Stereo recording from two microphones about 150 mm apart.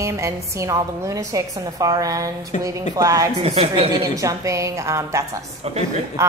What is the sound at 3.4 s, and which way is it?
Speech, 45° right (ahead or behind).